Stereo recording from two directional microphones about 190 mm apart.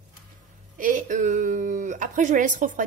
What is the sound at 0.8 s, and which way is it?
A woman's voice, 40° right (ahead or behind).